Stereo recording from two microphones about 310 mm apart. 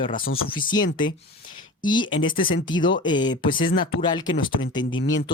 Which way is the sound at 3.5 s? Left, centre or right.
Left.